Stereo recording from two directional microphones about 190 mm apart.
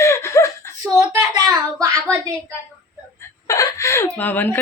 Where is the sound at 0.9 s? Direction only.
15° right (ahead or behind).